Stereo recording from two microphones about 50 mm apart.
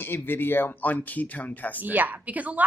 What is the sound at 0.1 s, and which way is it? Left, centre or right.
Speech, left.